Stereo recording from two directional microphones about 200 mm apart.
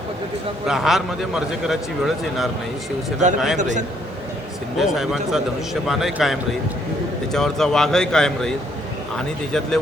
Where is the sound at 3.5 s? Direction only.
35° right (ahead or behind).